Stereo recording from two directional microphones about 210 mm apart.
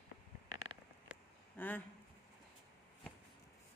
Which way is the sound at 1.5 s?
10° left (ahead or behind).